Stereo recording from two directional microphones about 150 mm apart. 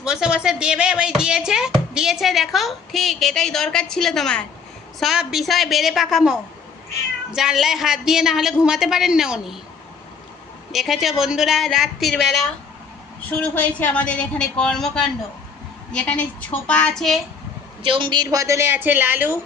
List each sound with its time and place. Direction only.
0.0 s speech: 5° right (ahead or behind)
10.7 s a woman's voice: centre (ahead or behind)
17.8 s a woman's voice: 35° right (ahead or behind); by 19.4 s 15° right (ahead or behind)